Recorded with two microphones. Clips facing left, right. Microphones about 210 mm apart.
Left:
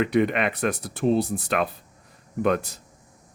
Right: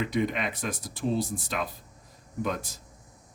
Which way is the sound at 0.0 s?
65° left (ahead or behind).